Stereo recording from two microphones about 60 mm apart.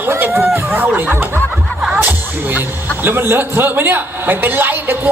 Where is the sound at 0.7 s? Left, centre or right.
Right.